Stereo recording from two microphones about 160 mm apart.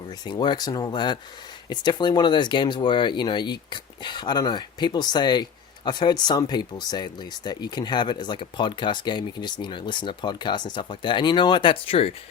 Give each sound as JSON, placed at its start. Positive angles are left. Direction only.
{"t": 0.3, "sound": "speech", "side_deg": 30}